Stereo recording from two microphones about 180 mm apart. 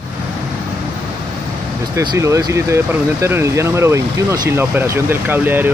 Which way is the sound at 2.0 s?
15° right (ahead or behind).